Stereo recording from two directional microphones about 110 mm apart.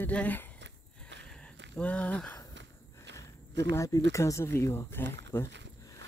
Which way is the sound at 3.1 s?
25° left (ahead or behind).